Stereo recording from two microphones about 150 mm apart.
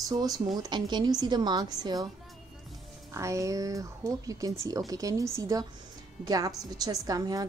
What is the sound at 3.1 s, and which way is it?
A woman's voice, 20° right (ahead or behind).